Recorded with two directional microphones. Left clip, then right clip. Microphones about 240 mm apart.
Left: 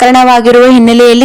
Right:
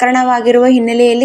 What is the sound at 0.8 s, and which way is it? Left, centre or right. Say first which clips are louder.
Speech: left 6 dB; left.